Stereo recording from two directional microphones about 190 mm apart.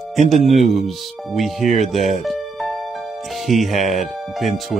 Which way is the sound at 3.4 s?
Centre (ahead or behind).